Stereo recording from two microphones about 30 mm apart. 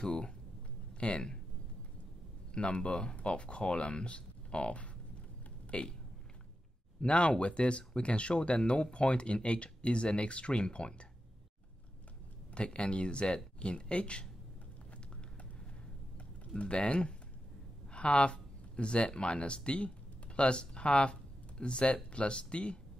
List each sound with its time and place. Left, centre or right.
0.0 s speech: left
2.5 s speech: left
7.0 s speech: left
12.5 s speech: left
16.5 s speech: left